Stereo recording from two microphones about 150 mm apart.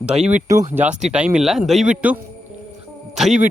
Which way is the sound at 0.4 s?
25° right (ahead or behind).